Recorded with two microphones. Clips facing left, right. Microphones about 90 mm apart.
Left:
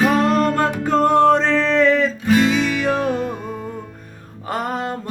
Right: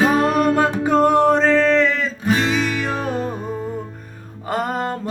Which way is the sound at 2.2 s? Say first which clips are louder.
Left 2 dB; 30° right (ahead or behind).